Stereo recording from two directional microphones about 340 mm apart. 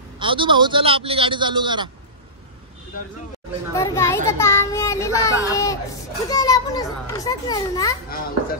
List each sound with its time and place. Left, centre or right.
0.2 s a man's voice: centre
3.7 s a child's voice: centre